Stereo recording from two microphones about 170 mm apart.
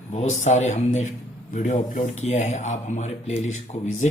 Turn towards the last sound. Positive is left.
turn(degrees=40)  # may be behind; listen again after turning